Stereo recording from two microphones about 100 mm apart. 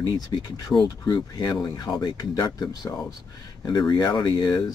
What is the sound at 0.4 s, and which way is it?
Speech, 40° left (ahead or behind).